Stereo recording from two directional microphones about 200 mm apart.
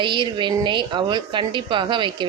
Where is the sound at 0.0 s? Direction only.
25° right (ahead or behind).